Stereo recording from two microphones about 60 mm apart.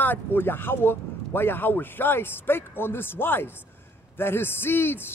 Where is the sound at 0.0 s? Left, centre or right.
Left.